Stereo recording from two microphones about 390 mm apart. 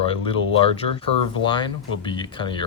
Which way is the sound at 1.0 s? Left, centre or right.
Centre.